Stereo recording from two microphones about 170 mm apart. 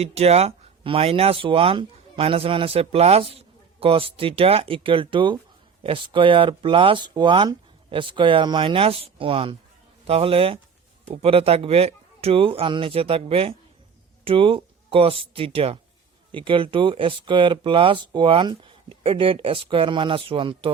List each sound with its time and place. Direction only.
0.0 s speech: 35° right (ahead or behind)